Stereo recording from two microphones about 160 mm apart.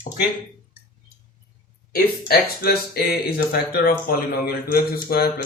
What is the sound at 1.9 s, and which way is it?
Speech, 75° left (ahead or behind).